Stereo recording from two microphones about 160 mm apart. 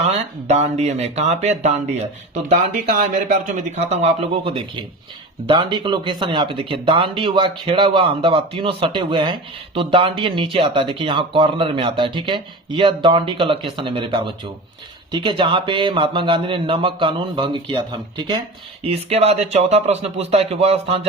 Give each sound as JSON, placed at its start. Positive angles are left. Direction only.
{"t": 0.0, "sound": "speech", "side_deg": -40}
{"t": 2.5, "sound": "speech", "side_deg": -55}
{"t": 5.5, "sound": "speech", "side_deg": -30}